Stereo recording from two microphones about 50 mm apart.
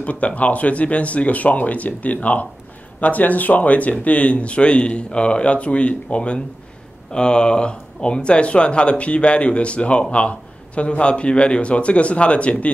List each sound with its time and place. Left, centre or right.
0.0 s speech: left